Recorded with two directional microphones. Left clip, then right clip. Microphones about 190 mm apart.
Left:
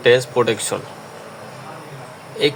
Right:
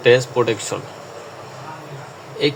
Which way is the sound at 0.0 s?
10° left (ahead or behind).